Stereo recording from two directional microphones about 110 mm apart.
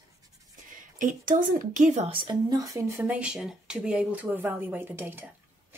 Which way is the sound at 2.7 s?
25° right (ahead or behind).